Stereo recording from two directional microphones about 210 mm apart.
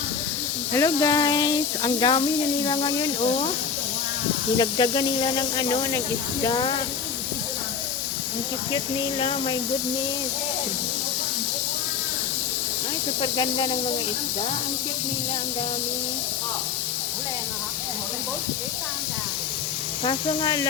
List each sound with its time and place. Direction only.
0.7 s speech: 15° left (ahead or behind)
4.5 s speech: 20° left (ahead or behind)
8.7 s speech: 25° left (ahead or behind)
13.2 s speech: 25° left (ahead or behind)
20.1 s speech: 20° left (ahead or behind)